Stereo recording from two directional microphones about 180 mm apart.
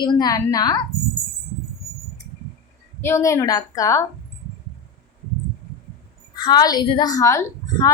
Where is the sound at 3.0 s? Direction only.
15° left (ahead or behind).